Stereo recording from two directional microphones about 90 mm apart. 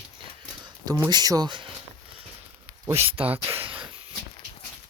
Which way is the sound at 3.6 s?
75° right (ahead or behind).